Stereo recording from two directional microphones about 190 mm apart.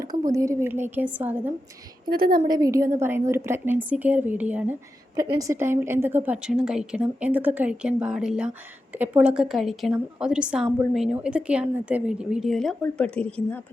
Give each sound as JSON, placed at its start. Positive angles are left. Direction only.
{"t": 0.0, "sound": "speech", "side_deg": -20}
{"t": 2.0, "sound": "a woman's voice", "side_deg": -50}
{"t": 2.5, "sound": "a woman's voice", "side_deg": -20}